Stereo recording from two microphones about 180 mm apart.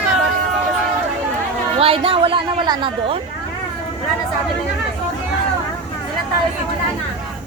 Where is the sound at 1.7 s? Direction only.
30° right (ahead or behind).